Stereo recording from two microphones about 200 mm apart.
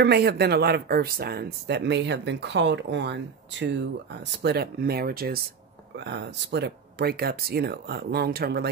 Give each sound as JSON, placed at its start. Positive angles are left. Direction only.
{"t": 0.0, "sound": "speech", "side_deg": -50}
{"t": 5.9, "sound": "speech", "side_deg": -60}